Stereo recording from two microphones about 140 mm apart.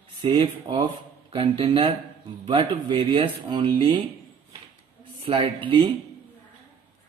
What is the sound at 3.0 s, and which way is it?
A man's voice, 35° right (ahead or behind).